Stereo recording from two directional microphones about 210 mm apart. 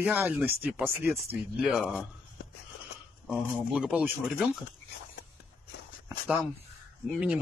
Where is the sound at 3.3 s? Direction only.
5° right (ahead or behind).